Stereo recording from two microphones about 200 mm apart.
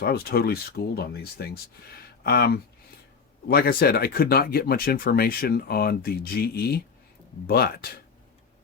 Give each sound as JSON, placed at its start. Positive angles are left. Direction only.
{"t": 0.0, "sound": "speech", "side_deg": 50}